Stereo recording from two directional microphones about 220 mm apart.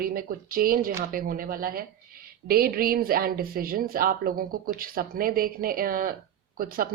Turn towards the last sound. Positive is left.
turn(degrees=-40)  # may be behind; listen again after turning